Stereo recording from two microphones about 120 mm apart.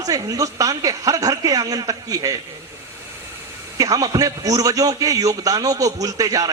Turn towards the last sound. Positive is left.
turn(degrees=-30)  # may be behind; listen again after turning